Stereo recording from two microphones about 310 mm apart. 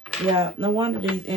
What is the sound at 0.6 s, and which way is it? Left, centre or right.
Speech, centre.